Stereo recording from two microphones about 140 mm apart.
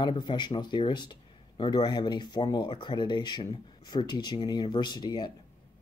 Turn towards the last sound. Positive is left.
turn(degrees=30)  # may be behind; listen again after turning